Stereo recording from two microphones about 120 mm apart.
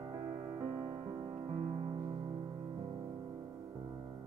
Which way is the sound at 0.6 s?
40° right (ahead or behind).